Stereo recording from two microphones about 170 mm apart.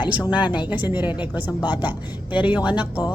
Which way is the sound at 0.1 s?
10° right (ahead or behind).